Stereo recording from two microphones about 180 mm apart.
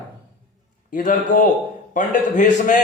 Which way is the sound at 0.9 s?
50° left (ahead or behind).